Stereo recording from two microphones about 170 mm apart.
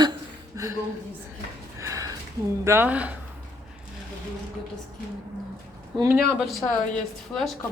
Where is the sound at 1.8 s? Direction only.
20° right (ahead or behind).